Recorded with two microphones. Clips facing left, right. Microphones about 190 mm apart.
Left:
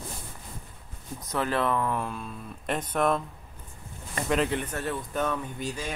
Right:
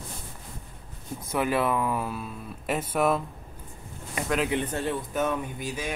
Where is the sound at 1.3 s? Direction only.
10° right (ahead or behind).